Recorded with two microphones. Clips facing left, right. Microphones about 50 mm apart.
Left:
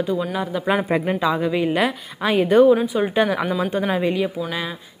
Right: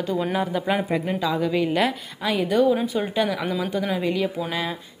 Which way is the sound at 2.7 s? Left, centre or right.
Centre.